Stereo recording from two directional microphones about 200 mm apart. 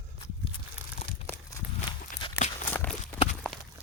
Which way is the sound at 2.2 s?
30° left (ahead or behind).